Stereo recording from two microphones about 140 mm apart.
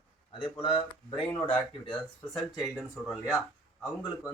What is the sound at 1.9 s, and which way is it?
Speech, 5° left (ahead or behind).